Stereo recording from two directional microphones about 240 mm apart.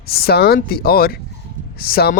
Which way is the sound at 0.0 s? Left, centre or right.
Left.